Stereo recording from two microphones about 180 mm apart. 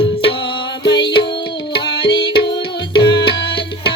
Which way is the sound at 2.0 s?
80° left.